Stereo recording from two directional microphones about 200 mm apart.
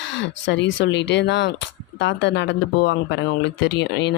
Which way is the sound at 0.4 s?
65° left (ahead or behind).